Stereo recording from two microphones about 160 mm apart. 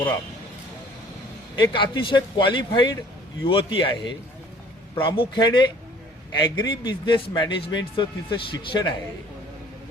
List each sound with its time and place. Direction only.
1.5 s a man's voice: 30° left (ahead or behind)